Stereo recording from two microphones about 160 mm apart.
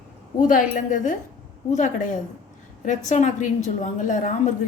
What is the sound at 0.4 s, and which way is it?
A woman's voice, 55° left (ahead or behind).